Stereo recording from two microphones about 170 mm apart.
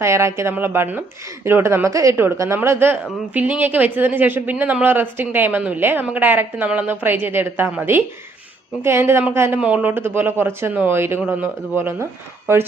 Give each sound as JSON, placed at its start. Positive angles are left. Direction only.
{"t": 0.0, "sound": "speech", "side_deg": -15}